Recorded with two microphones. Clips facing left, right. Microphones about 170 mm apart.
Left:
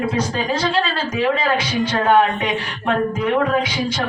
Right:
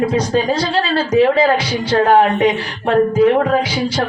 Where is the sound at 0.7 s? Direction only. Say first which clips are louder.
Right 6 dB; 35° right (ahead or behind).